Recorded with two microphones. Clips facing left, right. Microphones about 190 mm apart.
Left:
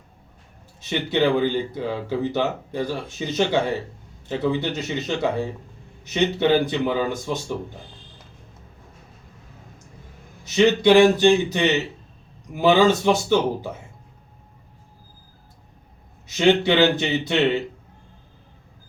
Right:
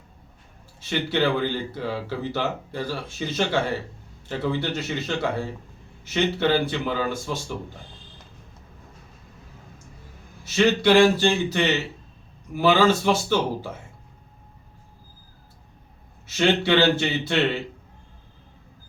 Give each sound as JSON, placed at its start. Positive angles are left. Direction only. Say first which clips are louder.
{"t": 0.8, "sound": "speech", "louder": "left 2 dB", "side_deg": 20}
{"t": 10.4, "sound": "speech", "louder": "left 3 dB", "side_deg": 15}
{"t": 16.2, "sound": "speech", "louder": "left 4 dB", "side_deg": 15}